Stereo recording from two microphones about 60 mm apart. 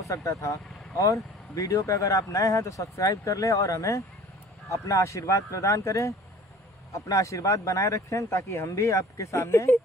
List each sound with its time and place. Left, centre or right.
0.0 s speech: left